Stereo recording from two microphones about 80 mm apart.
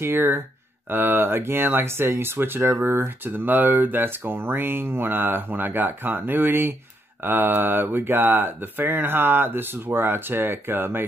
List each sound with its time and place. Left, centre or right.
0.0 s speech: right